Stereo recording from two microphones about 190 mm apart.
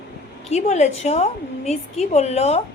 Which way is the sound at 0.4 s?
35° left (ahead or behind).